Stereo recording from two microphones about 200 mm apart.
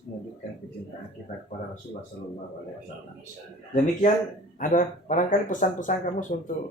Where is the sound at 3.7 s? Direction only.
40° left (ahead or behind).